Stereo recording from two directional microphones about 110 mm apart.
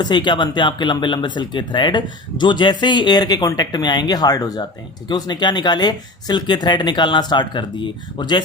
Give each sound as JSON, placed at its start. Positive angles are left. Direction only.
{"t": 0.0, "sound": "speech", "side_deg": 45}